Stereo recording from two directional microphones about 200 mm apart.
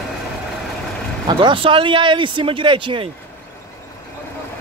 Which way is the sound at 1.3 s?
25° right (ahead or behind).